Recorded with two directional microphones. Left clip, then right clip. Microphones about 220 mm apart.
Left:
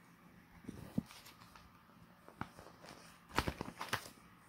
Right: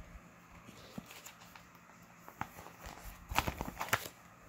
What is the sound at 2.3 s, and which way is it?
Walk, 20° right (ahead or behind).